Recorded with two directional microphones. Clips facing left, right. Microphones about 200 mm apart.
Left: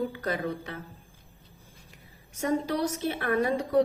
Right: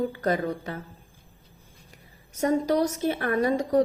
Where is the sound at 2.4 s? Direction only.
40° right (ahead or behind).